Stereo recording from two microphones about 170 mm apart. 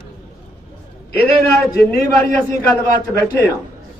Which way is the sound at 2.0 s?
20° left (ahead or behind).